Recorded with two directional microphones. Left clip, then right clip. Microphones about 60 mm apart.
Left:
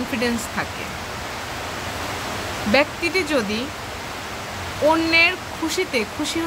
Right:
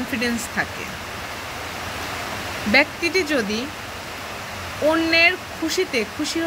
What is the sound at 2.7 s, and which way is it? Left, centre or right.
Speech, left.